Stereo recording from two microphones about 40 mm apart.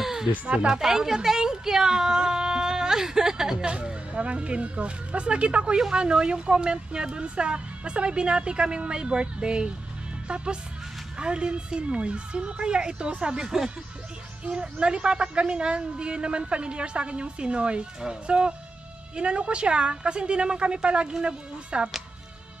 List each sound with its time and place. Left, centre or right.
0.0 s a sound: centre
0.7 s a woman's voice: centre
3.7 s a woman's voice: right
5.8 s a woman's voice: centre
13.4 s speech: centre
14.4 s a woman's voice: right